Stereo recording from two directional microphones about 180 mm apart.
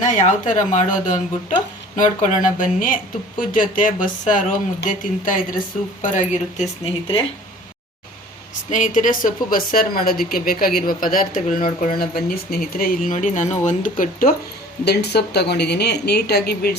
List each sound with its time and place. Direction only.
0.0 s speech: 45° left (ahead or behind)
8.7 s speech: 45° left (ahead or behind)
14.8 s a woman's voice: 65° left (ahead or behind)